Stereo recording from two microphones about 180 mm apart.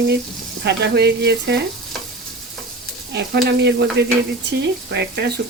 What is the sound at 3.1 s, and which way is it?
Speech, 65° right (ahead or behind).